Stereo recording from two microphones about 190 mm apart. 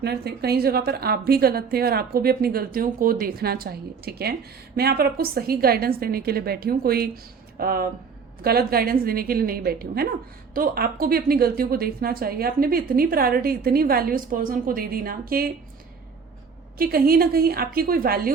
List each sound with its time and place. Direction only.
0.0 s a woman's voice: 60° right (ahead or behind)
16.7 s a woman's voice: 50° right (ahead or behind)